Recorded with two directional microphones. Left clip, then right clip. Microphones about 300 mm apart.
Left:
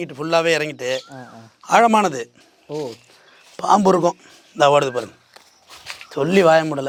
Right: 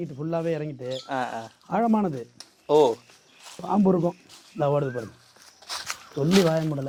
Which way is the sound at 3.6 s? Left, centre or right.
Centre.